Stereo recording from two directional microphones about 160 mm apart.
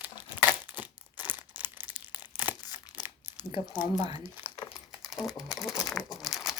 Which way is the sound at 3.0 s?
15° right (ahead or behind).